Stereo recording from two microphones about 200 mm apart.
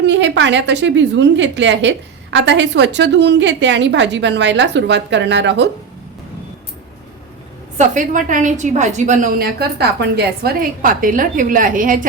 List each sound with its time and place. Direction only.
0.0 s a woman's voice: 60° right (ahead or behind)
7.8 s a woman's voice: 40° right (ahead or behind)